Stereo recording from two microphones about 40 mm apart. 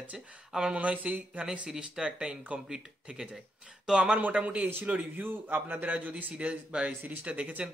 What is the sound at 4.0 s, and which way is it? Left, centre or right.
A man's voice, right.